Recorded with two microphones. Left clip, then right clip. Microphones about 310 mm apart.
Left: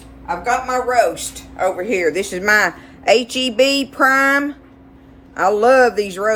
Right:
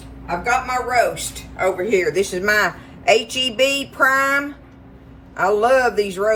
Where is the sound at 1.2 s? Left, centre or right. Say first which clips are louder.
Left 2 dB; centre.